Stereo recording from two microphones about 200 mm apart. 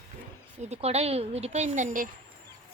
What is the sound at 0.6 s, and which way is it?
Speech, 30° right (ahead or behind).